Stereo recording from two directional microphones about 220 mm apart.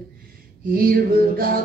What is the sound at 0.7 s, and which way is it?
Female singing, 40° right (ahead or behind).